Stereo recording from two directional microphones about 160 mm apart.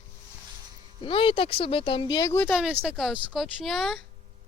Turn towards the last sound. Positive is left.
turn(degrees=0)  # may be behind; listen again after turning